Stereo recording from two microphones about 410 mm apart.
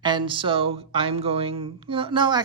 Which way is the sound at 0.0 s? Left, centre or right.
Centre.